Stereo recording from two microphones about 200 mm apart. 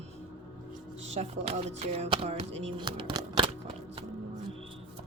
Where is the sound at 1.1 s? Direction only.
35° right (ahead or behind).